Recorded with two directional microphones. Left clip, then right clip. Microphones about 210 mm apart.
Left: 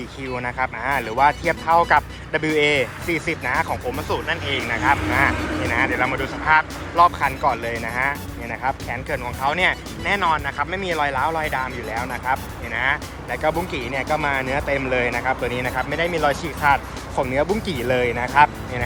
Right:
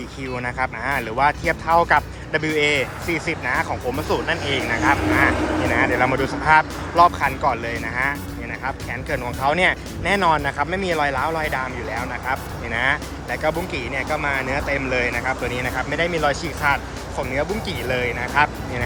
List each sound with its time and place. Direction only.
0.3 s speech: 5° right (ahead or behind)
3.9 s speech: 15° right (ahead or behind)
4.6 s speech: 55° right (ahead or behind)
5.7 s speech: 10° right (ahead or behind)